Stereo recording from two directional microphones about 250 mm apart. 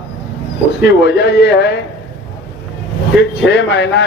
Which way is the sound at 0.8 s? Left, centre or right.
Left.